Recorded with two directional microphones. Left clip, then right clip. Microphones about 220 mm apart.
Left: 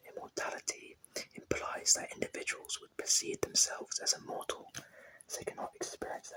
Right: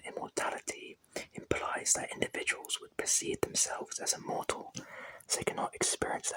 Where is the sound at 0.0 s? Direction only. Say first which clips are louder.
Right 4 dB; 25° right (ahead or behind).